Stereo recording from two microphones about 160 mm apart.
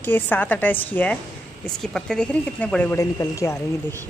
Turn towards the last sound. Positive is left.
turn(degrees=20)  # may be behind; listen again after turning